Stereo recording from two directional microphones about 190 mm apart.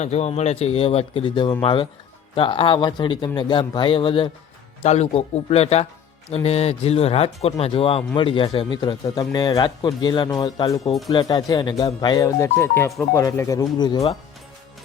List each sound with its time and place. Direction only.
0.0 s speech: 35° left (ahead or behind)